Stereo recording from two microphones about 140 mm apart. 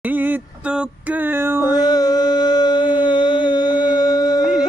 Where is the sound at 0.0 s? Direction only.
15° right (ahead or behind).